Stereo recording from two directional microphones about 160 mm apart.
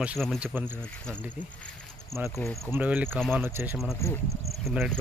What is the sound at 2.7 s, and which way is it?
Speech, 10° right (ahead or behind).